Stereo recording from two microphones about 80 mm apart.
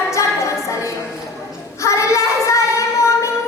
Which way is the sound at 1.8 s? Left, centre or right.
Left.